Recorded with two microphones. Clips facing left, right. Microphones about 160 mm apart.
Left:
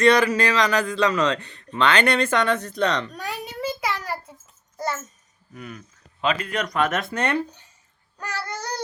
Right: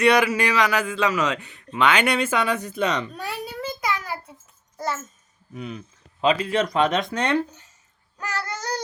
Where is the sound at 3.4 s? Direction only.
10° left (ahead or behind).